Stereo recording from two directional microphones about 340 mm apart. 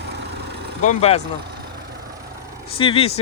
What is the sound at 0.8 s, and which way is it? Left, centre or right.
Speech, centre.